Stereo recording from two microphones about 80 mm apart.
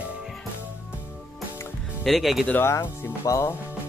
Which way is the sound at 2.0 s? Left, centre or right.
Centre.